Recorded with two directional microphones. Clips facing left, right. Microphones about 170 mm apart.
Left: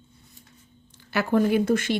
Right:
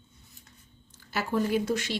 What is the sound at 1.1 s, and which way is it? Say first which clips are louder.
Speech: left 6 dB; 65° left (ahead or behind).